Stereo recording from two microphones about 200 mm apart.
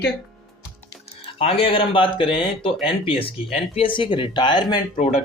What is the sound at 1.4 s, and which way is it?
Speech, 30° left (ahead or behind).